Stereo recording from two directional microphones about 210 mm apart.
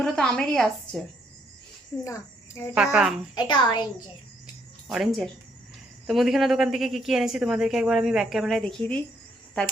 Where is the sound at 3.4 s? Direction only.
20° left (ahead or behind).